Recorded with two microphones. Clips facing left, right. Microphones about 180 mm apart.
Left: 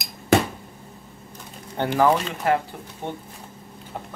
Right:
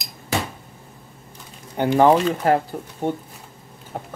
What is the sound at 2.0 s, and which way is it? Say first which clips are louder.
Speech: right 5 dB; 35° right (ahead or behind).